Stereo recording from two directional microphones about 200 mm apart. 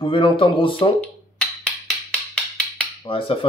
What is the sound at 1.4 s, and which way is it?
Wood block, 5° left (ahead or behind).